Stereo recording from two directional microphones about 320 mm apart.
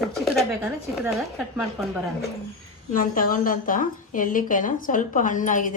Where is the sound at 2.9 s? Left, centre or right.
Left.